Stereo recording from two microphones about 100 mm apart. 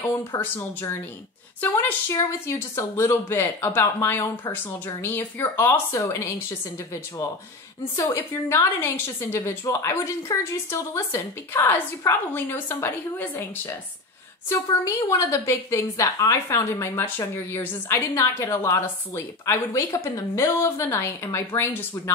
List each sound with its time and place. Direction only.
0.4 s a woman's voice: 20° left (ahead or behind)
7.9 s a woman's voice: 30° left (ahead or behind)